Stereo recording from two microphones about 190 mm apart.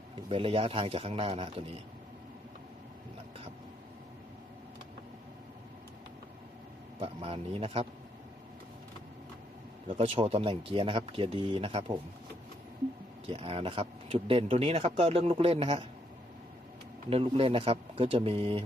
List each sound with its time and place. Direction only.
0.2 s speech: 30° right (ahead or behind)
7.0 s speech: 30° right (ahead or behind)
9.8 s speech: 25° right (ahead or behind)
13.2 s speech: 30° right (ahead or behind)
17.1 s speech: 30° right (ahead or behind)